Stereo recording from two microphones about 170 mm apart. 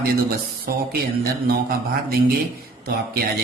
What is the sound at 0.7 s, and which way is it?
Speech, 60° right (ahead or behind).